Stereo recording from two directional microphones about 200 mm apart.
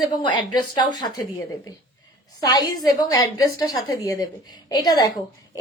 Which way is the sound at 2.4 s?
20° left (ahead or behind).